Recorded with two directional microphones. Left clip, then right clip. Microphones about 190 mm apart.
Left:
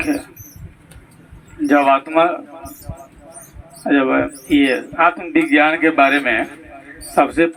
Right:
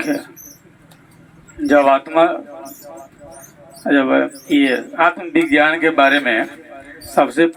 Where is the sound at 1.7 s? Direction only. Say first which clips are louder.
Right 1 dB; 40° right (ahead or behind).